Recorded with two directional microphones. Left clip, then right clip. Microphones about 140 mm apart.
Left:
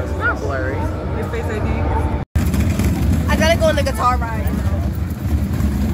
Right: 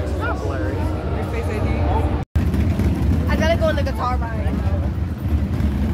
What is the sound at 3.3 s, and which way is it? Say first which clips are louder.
Vehicle: left 4 dB; 40° left (ahead or behind).